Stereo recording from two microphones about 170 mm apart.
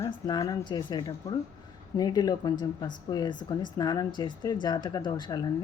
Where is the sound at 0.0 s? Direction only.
20° left (ahead or behind).